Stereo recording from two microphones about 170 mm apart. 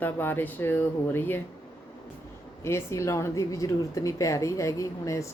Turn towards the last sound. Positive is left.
turn(degrees=20)  # may be behind; listen again after turning